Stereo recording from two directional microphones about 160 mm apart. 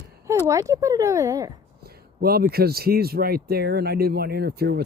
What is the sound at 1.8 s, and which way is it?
A man's voice, 75° right (ahead or behind).